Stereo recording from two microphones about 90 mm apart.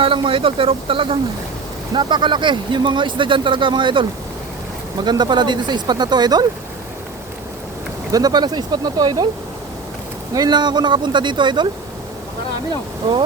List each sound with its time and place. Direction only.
0.0 s speech: 75° right (ahead or behind)
2.0 s speech: 60° right (ahead or behind)
5.0 s speech: 55° right (ahead or behind)
8.1 s speech: 45° right (ahead or behind)
10.3 s speech: 50° right (ahead or behind)